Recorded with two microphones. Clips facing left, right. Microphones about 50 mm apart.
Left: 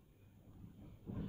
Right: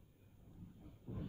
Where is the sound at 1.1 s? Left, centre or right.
Left.